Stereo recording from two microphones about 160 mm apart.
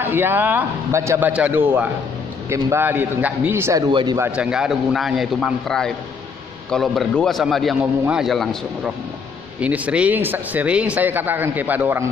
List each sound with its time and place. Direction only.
0.0 s speech: 15° right (ahead or behind)
4.2 s a man's voice: 5° right (ahead or behind)